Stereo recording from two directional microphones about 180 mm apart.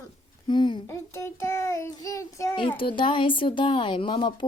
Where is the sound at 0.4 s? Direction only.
25° left (ahead or behind).